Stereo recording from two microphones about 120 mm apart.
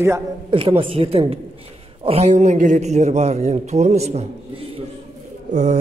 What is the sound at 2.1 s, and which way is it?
A man's voice, 65° right (ahead or behind).